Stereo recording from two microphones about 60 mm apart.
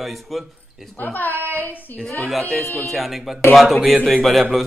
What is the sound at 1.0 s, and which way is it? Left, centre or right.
Speech, left.